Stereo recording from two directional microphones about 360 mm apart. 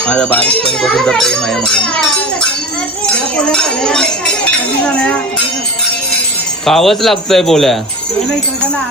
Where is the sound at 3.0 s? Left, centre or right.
Centre.